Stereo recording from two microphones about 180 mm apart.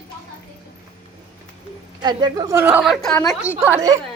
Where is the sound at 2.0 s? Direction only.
25° right (ahead or behind).